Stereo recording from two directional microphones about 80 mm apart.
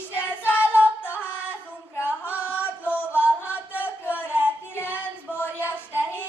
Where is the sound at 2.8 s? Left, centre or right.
Left.